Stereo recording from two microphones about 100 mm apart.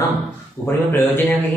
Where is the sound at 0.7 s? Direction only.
20° left (ahead or behind).